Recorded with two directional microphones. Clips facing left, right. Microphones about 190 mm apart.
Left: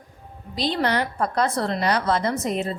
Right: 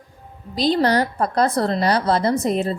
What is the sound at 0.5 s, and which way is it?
A woman's voice, 40° right (ahead or behind).